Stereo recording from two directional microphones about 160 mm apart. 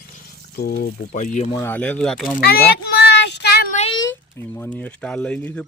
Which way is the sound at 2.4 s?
75° left (ahead or behind).